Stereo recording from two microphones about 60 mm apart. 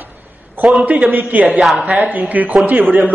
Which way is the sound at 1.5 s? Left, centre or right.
Centre.